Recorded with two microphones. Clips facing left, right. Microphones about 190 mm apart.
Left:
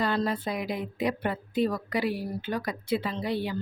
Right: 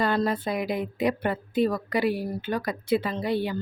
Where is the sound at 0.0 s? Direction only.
50° right (ahead or behind).